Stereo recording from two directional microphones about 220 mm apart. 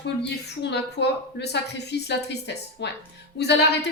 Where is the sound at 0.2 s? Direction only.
50° left (ahead or behind).